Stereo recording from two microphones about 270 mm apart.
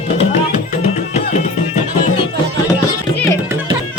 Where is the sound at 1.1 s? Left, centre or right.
Left.